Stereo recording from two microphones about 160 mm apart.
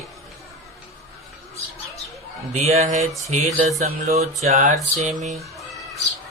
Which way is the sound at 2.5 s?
45° right (ahead or behind).